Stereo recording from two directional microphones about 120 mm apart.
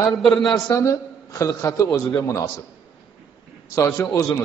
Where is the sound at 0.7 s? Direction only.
25° left (ahead or behind).